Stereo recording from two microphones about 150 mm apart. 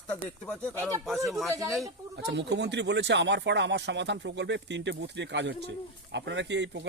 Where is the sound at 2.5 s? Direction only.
90° right.